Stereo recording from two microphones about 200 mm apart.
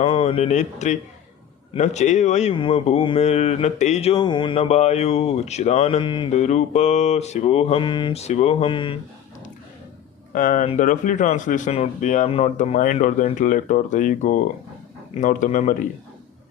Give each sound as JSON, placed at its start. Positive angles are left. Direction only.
{"t": 0.0, "sound": "speech", "side_deg": 30}
{"t": 10.3, "sound": "speech", "side_deg": 40}